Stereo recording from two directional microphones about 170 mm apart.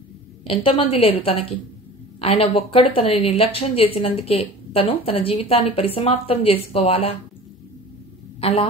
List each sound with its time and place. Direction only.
0.5 s speech: 35° left (ahead or behind)
8.4 s a man's voice: 35° left (ahead or behind)